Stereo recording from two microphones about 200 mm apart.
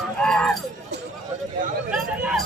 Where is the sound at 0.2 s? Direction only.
5° left (ahead or behind).